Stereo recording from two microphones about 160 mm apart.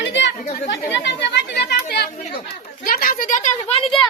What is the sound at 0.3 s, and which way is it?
Chatter, 60° left (ahead or behind).